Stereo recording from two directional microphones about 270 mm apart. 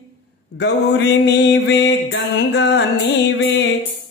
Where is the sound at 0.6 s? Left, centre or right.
Left.